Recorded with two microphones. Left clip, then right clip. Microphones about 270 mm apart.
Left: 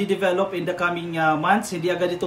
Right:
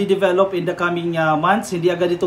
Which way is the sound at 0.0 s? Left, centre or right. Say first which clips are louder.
Right 5 dB; centre.